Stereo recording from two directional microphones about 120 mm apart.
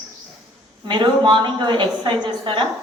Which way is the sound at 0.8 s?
40° right (ahead or behind).